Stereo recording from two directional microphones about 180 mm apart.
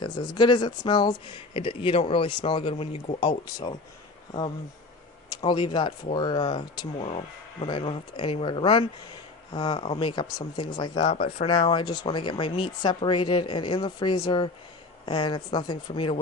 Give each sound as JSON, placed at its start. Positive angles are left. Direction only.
{"t": 0.0, "sound": "speech", "side_deg": 25}
{"t": 5.3, "sound": "speech", "side_deg": 25}